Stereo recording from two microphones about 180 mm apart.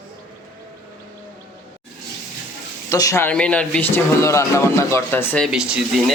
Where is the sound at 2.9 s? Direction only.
15° left (ahead or behind).